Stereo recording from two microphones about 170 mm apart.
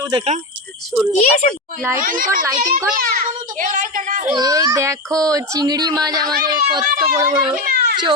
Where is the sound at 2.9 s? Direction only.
55° right (ahead or behind).